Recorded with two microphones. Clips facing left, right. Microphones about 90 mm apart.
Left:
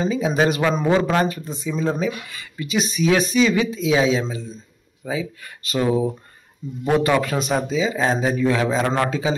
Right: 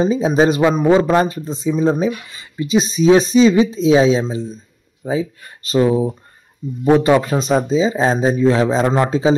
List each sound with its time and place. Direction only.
0.0 s speech: 25° right (ahead or behind)